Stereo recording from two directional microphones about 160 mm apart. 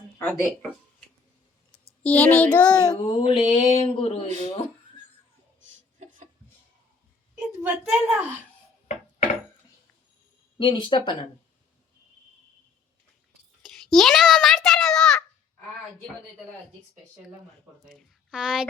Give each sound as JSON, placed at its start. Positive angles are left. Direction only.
{"t": 2.0, "sound": "child singing", "side_deg": 10}
{"t": 2.8, "sound": "speech", "side_deg": 25}
{"t": 6.0, "sound": "a sound", "side_deg": -45}
{"t": 7.6, "sound": "a child's voice", "side_deg": -10}
{"t": 10.6, "sound": "speech", "side_deg": 30}
{"t": 13.6, "sound": "a sound", "side_deg": 0}
{"t": 18.3, "sound": "speech", "side_deg": -5}